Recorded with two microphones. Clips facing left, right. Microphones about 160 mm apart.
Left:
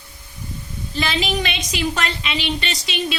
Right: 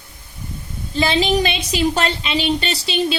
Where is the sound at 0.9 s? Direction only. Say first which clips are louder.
Right 6 dB; 30° right (ahead or behind).